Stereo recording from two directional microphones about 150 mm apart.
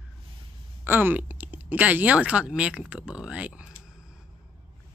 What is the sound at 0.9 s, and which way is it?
Speech, 15° right (ahead or behind).